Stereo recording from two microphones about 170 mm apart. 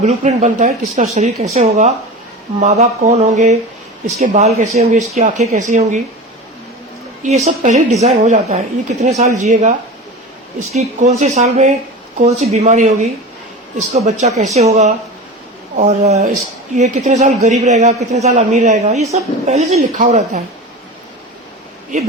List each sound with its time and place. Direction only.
0.0 s a man's voice: 40° right (ahead or behind)
7.2 s a man's voice: 40° right (ahead or behind)